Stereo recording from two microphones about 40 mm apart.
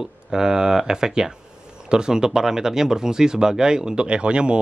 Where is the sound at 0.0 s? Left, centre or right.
Centre.